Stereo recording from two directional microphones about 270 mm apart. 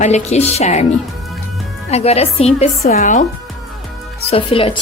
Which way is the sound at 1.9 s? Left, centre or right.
Left.